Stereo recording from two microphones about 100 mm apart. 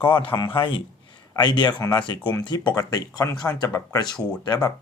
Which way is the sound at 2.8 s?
40° left (ahead or behind).